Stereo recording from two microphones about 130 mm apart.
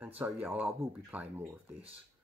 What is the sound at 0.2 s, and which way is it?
Speech, 10° right (ahead or behind).